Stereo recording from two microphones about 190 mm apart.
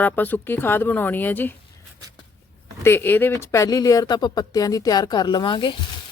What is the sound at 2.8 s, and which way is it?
Speech, 10° left (ahead or behind).